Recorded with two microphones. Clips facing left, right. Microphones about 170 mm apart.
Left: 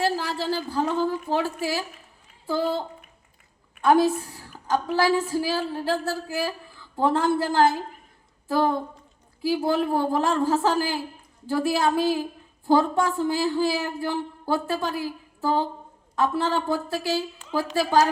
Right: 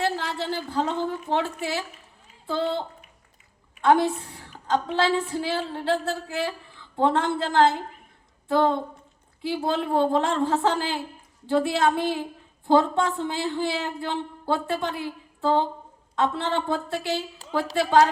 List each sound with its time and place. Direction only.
0.0 s a woman's voice: 20° right (ahead or behind)
3.8 s a woman's voice: 25° right (ahead or behind)